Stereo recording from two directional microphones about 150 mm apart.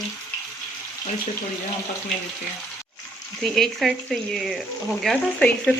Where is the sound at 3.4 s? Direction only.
Centre (ahead or behind).